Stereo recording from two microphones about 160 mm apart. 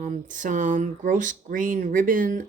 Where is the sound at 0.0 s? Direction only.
50° right (ahead or behind).